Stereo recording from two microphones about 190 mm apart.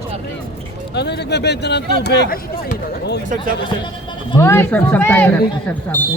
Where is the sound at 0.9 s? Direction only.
60° left (ahead or behind).